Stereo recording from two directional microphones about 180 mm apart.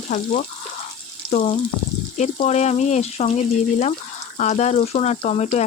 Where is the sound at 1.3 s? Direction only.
40° left (ahead or behind).